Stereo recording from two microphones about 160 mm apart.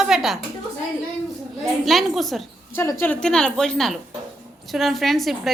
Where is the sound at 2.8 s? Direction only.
15° left (ahead or behind).